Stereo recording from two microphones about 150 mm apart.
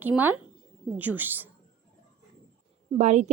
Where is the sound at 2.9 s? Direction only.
50° right (ahead or behind).